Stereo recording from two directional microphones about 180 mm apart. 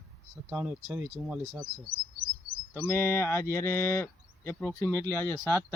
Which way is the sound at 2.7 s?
15° left (ahead or behind).